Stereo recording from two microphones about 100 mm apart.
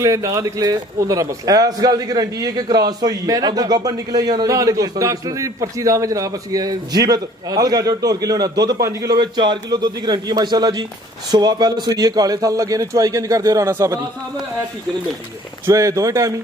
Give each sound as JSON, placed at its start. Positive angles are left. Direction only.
{"t": 0.0, "sound": "a man's voice", "side_deg": -35}
{"t": 15.6, "sound": "a man's voice", "side_deg": -35}